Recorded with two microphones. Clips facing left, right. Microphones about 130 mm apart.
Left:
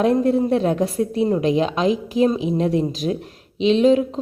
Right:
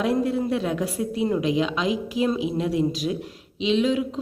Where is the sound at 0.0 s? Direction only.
45° left (ahead or behind).